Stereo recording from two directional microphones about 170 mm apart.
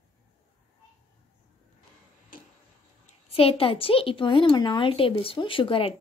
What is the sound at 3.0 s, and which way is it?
A woman's voice, 35° left (ahead or behind).